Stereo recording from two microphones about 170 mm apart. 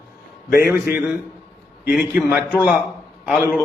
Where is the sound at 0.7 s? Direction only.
15° right (ahead or behind).